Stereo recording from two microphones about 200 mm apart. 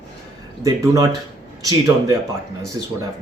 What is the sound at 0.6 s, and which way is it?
Speech, 15° right (ahead or behind).